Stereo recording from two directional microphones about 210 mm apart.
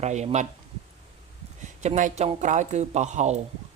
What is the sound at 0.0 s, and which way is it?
Speech, 30° right (ahead or behind).